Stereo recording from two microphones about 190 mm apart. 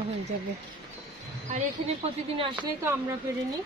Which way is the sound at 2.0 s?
30° right (ahead or behind).